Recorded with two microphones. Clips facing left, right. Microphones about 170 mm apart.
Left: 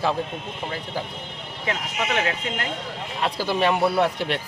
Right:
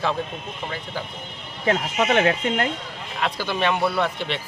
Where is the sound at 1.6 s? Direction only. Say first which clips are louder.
Right 6 dB; 45° right (ahead or behind).